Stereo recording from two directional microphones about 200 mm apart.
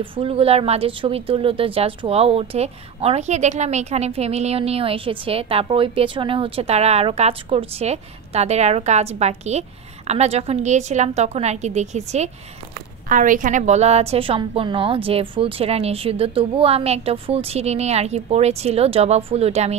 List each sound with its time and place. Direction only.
0.0 s speech: 25° right (ahead or behind)